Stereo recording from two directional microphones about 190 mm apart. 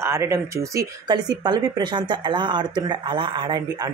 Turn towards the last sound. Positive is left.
turn(degrees=-25)  # may be behind; listen again after turning